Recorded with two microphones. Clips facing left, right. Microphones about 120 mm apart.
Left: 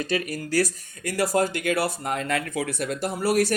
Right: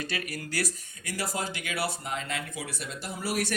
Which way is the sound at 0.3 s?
45° left (ahead or behind).